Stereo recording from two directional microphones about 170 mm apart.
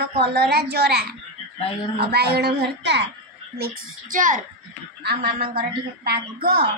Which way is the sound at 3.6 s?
55° right (ahead or behind).